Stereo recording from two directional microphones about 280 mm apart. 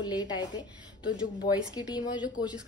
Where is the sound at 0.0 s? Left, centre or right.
Centre.